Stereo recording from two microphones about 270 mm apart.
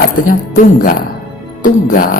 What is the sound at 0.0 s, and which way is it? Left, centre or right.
Speech, left.